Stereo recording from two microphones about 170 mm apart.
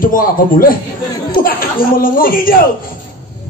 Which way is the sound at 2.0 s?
55° left (ahead or behind).